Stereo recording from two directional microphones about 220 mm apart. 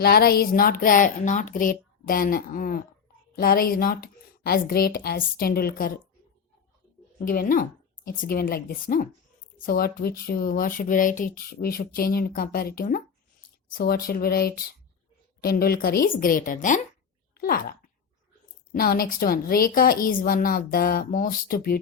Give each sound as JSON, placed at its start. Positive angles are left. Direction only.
{"t": 0.0, "sound": "speech", "side_deg": 45}
{"t": 7.3, "sound": "speech", "side_deg": 40}
{"t": 17.3, "sound": "a sound", "side_deg": 40}
{"t": 18.7, "sound": "speech", "side_deg": 40}